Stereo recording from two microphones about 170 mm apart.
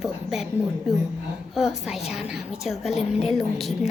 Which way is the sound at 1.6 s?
5° right (ahead or behind).